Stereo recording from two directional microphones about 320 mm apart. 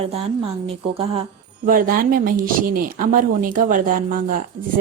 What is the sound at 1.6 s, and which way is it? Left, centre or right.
A woman's voice, right.